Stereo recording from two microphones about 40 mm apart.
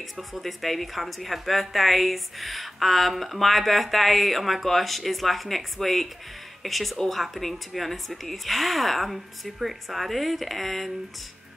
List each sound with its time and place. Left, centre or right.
0.3 s a woman's voice: centre